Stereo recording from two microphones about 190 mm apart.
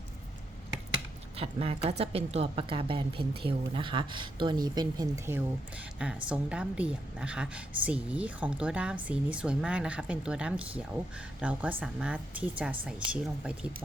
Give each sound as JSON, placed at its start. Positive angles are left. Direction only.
{"t": 1.4, "sound": "a woman's voice", "side_deg": -30}